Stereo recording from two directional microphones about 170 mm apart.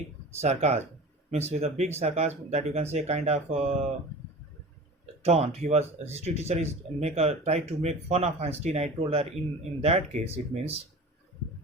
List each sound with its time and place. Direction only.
0.4 s speech: 40° right (ahead or behind)
5.2 s speech: 40° right (ahead or behind)